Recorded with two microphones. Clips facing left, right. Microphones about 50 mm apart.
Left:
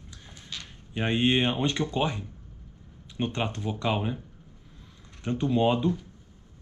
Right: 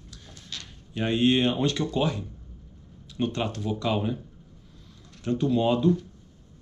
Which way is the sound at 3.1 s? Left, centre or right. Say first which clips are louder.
Right 2 dB; left.